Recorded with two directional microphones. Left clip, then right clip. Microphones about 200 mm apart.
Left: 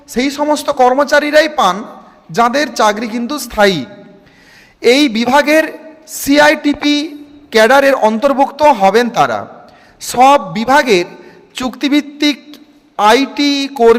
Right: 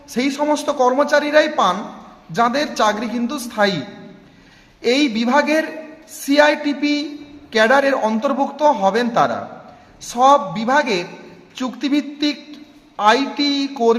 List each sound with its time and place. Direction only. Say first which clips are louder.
0.1 s a man's voice: left 5 dB; 35° left (ahead or behind)